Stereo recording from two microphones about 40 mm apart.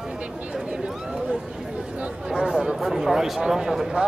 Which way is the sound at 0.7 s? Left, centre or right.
Right.